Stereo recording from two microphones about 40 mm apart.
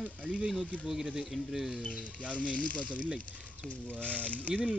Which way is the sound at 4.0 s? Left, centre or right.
Left.